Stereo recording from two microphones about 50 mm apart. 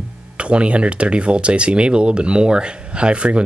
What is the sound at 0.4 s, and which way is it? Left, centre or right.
Speech, right.